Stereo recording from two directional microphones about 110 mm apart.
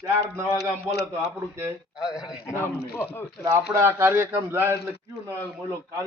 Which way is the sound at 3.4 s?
30° right (ahead or behind).